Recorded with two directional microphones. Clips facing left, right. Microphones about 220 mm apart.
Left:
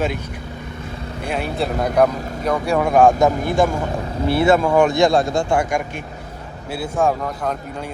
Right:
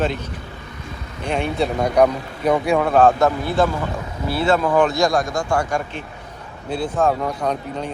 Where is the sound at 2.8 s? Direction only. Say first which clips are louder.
Left 3 dB; 10° left (ahead or behind).